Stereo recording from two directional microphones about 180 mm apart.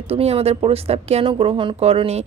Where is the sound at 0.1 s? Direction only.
35° right (ahead or behind).